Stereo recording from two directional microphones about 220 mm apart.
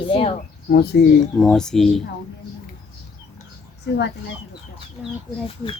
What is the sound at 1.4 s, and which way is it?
Speech, centre (ahead or behind).